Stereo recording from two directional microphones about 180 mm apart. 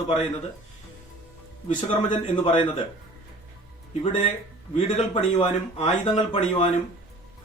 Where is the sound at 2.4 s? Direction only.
30° left (ahead or behind).